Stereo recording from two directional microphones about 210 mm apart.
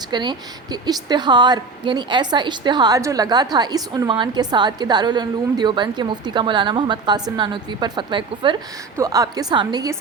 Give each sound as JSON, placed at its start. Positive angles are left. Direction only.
{"t": 0.1, "sound": "a woman's voice", "side_deg": -20}